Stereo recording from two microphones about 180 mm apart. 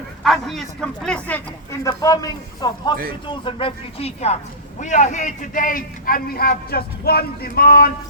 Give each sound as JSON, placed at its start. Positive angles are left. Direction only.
{"t": 0.2, "sound": "speech", "side_deg": 0}
{"t": 1.8, "sound": "a man's voice", "side_deg": 20}